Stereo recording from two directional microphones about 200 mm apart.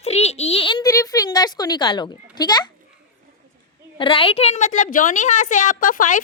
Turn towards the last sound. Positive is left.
turn(degrees=40)  # may be behind; listen again after turning